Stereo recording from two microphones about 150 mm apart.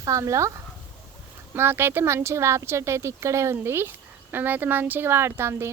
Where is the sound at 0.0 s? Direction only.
20° right (ahead or behind).